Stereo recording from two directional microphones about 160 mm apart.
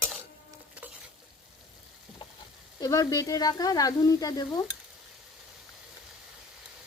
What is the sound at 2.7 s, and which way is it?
Speech, 25° left (ahead or behind).